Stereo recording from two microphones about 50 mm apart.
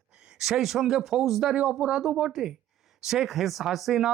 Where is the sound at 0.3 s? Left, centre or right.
Centre.